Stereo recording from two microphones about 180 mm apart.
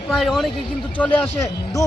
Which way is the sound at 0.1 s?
Centre (ahead or behind).